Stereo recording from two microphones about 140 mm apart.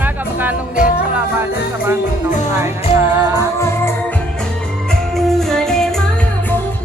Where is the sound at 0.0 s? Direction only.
15° right (ahead or behind).